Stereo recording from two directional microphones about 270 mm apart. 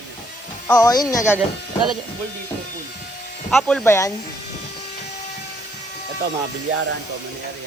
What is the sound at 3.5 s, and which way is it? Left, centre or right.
Speech, centre.